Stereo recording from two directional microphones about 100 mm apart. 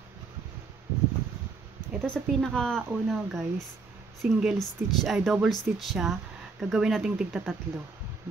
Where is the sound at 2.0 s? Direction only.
10° left (ahead or behind); by 7.4 s 10° right (ahead or behind).